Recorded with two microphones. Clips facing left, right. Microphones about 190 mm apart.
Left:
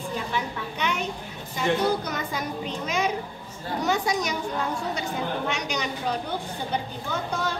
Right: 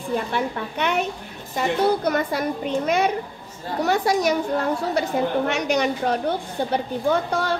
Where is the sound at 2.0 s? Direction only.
60° right (ahead or behind).